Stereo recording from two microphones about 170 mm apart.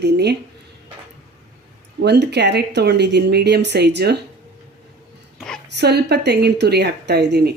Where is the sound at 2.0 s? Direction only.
85° right.